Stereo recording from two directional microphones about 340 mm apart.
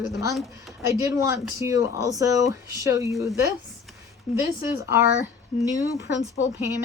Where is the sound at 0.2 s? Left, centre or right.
Centre.